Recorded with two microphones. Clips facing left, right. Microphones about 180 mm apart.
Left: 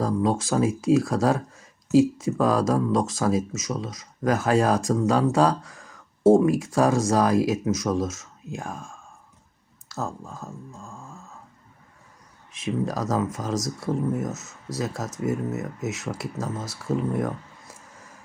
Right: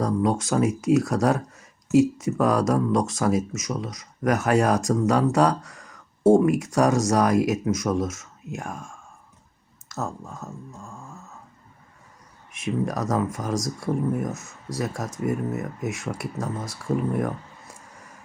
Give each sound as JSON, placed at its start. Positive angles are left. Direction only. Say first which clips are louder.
{"t": 0.3, "sound": "speech", "louder": "even", "side_deg": 25}
{"t": 10.0, "sound": "speech", "louder": "even", "side_deg": 0}
{"t": 12.5, "sound": "speech", "louder": "right 1 dB", "side_deg": 25}